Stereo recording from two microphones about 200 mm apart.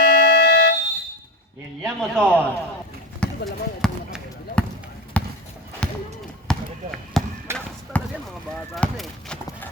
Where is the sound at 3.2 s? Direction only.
5° left (ahead or behind).